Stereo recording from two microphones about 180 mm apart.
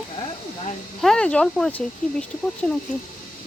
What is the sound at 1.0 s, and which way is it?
Speech, 5° left (ahead or behind).